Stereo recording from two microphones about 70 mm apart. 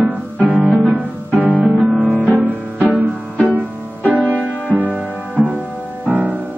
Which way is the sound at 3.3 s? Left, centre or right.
Left.